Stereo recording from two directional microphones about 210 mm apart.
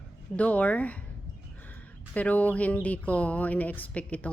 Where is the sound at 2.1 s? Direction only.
5° left (ahead or behind).